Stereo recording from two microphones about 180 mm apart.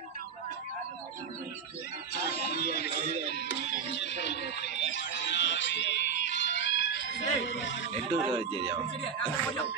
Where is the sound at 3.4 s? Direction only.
75° left (ahead or behind).